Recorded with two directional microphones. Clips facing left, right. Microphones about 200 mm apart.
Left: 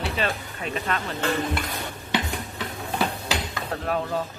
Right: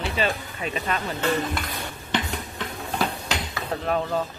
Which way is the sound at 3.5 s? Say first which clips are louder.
Right 5 dB; 5° right (ahead or behind).